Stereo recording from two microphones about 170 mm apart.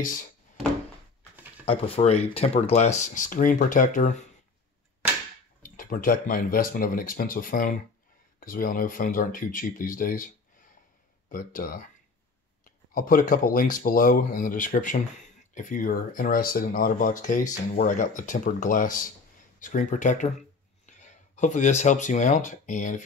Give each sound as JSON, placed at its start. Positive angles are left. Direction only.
{"t": 1.7, "sound": "speech", "side_deg": 35}
{"t": 5.6, "sound": "speech", "side_deg": 55}